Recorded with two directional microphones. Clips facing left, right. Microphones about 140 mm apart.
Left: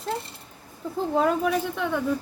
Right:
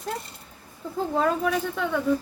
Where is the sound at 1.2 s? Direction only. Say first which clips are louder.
Left 1 dB; 10° left (ahead or behind).